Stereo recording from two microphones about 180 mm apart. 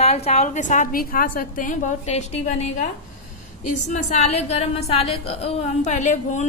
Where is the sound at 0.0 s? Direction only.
35° left (ahead or behind).